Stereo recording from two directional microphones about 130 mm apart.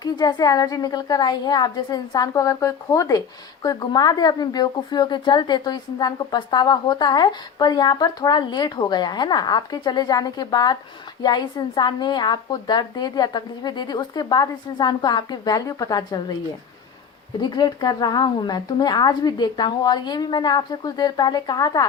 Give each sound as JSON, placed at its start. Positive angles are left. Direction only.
{"t": 0.0, "sound": "a woman's voice", "side_deg": 30}
{"t": 17.4, "sound": "a woman's voice", "side_deg": 35}